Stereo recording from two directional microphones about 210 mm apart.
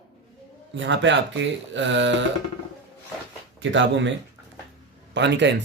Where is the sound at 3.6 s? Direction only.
60° right (ahead or behind).